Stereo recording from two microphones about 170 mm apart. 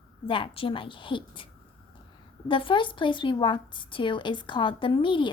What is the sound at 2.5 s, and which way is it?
A woman's voice, 30° left (ahead or behind).